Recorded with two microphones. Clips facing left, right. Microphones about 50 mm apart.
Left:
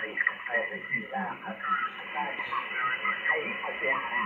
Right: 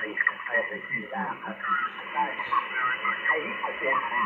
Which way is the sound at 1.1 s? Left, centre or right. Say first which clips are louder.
Right 2 dB; right.